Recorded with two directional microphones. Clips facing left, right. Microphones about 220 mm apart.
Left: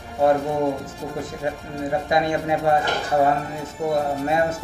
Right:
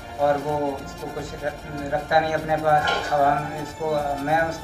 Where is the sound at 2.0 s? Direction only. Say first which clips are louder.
Even; 20° left (ahead or behind).